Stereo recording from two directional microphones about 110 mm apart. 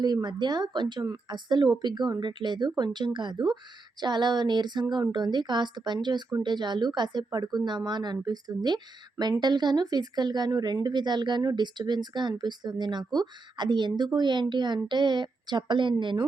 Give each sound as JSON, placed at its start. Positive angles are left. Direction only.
{"t": 0.0, "sound": "a woman's voice", "side_deg": -40}